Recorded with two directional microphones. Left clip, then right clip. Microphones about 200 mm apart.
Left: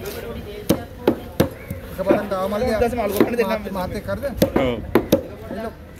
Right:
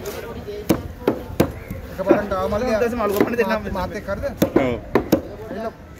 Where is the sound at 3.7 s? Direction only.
10° right (ahead or behind).